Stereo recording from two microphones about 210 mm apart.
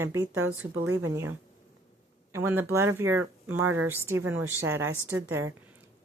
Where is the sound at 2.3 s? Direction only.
10° right (ahead or behind).